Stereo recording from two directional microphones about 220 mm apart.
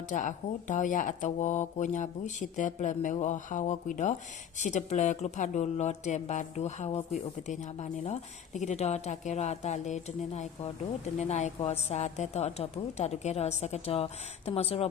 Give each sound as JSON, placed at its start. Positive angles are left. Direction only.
{"t": 0.1, "sound": "a woman's voice", "side_deg": 35}